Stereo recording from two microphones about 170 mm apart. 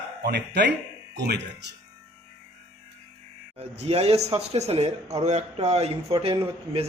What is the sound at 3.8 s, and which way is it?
A man's voice, 40° right (ahead or behind).